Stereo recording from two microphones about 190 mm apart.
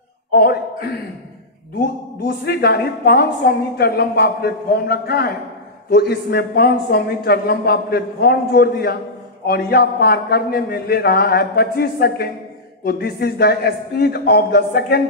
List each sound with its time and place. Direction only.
0.3 s a man's voice: 55° left (ahead or behind)
2.2 s a woman's voice: 55° left (ahead or behind)